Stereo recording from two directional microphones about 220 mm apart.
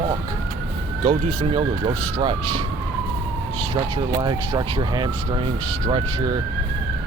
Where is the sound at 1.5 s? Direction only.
25° right (ahead or behind).